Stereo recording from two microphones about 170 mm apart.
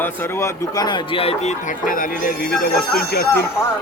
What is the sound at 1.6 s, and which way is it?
Music, 55° left (ahead or behind).